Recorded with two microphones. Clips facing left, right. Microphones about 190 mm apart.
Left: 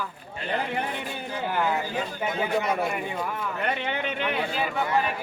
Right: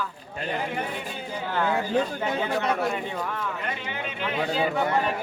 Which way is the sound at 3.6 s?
65° left (ahead or behind).